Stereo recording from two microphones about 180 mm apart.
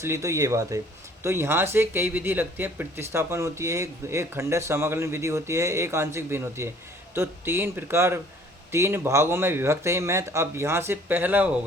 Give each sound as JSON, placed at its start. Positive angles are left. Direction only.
{"t": 0.0, "sound": "speech", "side_deg": -15}